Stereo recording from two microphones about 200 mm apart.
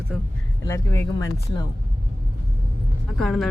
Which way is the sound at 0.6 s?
15° left (ahead or behind).